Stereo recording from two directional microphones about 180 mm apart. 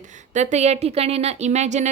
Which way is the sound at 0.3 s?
40° right (ahead or behind).